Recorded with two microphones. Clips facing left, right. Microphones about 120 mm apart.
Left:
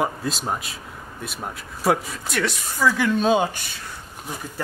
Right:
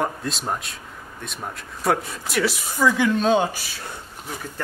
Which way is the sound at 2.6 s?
15° right (ahead or behind).